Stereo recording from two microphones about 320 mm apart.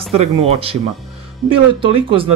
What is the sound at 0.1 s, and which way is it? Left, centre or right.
Speech, centre.